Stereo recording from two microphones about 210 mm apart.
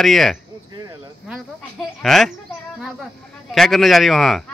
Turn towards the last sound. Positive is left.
turn(degrees=0)  # may be behind; listen again after turning